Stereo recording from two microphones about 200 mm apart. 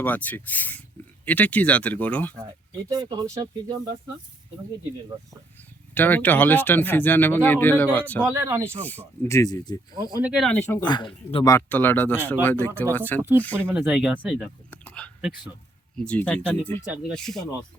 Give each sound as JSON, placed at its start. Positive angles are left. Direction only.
{"t": 0.0, "sound": "speech", "side_deg": 10}
{"t": 2.9, "sound": "speech", "side_deg": -20}
{"t": 5.9, "sound": "speech", "side_deg": 10}
{"t": 8.3, "sound": "speech", "side_deg": -15}
{"t": 8.8, "sound": "speech", "side_deg": 10}
{"t": 10.2, "sound": "speech", "side_deg": 0}
{"t": 11.5, "sound": "speech", "side_deg": 10}
{"t": 13.7, "sound": "speech", "side_deg": -5}
{"t": 16.8, "sound": "speech", "side_deg": 0}